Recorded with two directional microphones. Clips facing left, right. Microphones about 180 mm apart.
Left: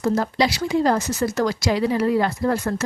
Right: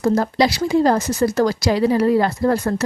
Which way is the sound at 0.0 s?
40° right (ahead or behind).